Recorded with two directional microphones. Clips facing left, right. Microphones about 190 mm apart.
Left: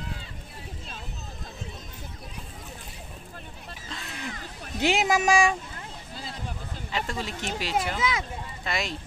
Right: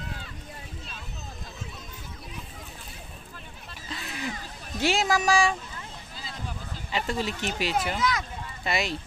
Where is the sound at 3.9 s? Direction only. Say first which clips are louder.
Right 3 dB; 5° right (ahead or behind).